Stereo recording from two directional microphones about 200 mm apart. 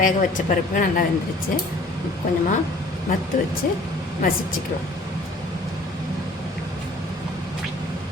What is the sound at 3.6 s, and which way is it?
Speech, 45° left (ahead or behind).